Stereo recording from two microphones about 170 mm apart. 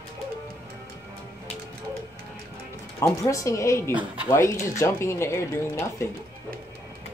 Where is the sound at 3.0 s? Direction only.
20° left (ahead or behind).